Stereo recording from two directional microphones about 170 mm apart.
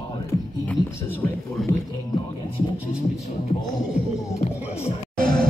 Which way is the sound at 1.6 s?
Centre (ahead or behind).